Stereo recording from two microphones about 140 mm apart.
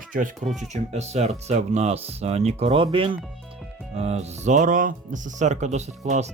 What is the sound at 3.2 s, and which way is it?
Music, centre (ahead or behind).